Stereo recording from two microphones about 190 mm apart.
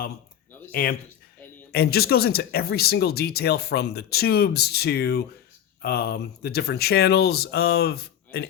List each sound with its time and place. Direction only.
0.7 s a man's voice: 55° left (ahead or behind)